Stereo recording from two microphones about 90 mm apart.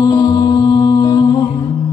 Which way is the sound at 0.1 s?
45° left (ahead or behind).